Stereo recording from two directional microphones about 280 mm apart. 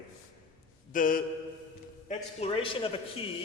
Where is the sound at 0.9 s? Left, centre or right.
Left.